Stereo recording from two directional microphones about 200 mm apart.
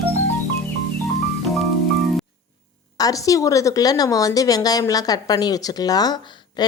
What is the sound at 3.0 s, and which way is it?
A woman's voice, 15° left (ahead or behind).